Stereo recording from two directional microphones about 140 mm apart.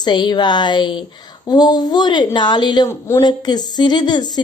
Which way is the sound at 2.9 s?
20° left (ahead or behind).